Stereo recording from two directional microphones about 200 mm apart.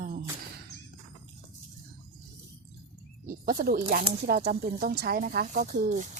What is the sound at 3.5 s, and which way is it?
Speech, 45° right (ahead or behind).